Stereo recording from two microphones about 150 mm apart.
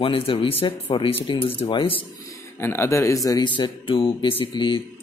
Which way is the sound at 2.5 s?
15° left (ahead or behind).